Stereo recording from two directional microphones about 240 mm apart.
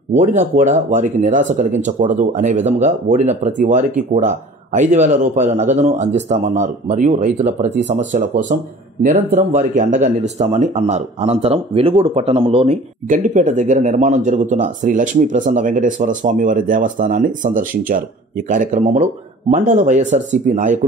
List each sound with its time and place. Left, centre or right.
0.2 s speech: right